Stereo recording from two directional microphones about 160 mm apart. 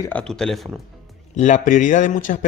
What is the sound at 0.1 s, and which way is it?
Speech, 5° left (ahead or behind).